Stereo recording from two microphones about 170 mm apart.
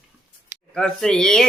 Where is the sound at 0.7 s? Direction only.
5° left (ahead or behind).